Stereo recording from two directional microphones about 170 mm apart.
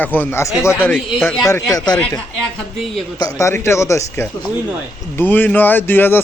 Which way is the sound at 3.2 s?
20° left (ahead or behind).